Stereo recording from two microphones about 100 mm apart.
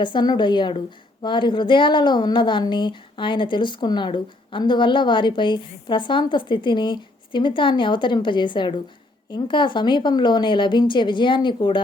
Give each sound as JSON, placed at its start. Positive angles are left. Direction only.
{"t": 0.0, "sound": "a woman's voice", "side_deg": 50}